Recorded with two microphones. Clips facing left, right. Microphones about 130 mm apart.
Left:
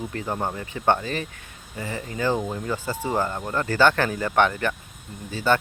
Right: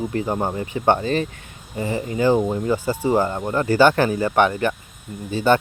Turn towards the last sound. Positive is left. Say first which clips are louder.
# right 5 dB
turn(degrees=-20)  # may be behind; listen again after turning